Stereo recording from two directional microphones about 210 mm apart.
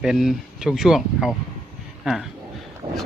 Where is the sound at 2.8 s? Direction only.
25° right (ahead or behind).